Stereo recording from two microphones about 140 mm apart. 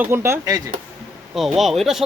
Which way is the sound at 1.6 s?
Centre (ahead or behind).